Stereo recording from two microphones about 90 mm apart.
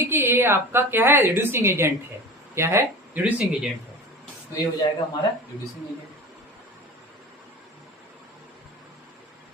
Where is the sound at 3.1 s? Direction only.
15° right (ahead or behind).